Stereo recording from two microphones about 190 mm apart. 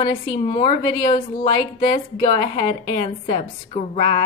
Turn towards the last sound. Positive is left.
turn(degrees=30)  # may be behind; listen again after turning